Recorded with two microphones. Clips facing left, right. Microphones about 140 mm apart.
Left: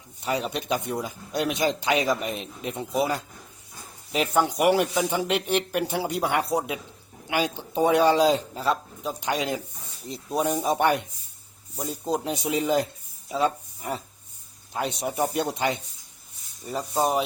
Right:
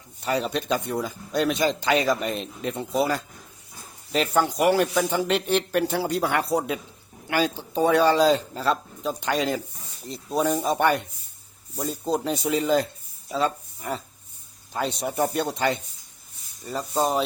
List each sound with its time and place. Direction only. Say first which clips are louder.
0.3 s speech: right 2 dB; 10° left (ahead or behind)